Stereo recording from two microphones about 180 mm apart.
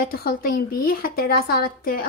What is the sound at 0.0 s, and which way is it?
A woman's voice, 55° left (ahead or behind).